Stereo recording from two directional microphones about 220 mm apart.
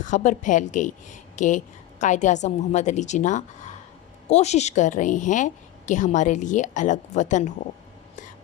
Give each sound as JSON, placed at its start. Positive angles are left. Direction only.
{"t": 0.0, "sound": "a woman's voice", "side_deg": 35}